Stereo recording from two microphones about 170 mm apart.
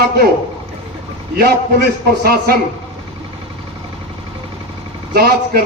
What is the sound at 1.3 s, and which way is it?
A man's voice, 65° right (ahead or behind).